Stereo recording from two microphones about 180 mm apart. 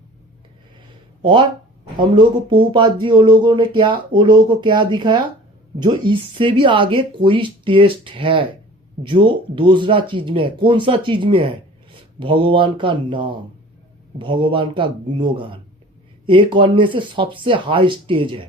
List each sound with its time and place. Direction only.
1.2 s speech: 30° right (ahead or behind)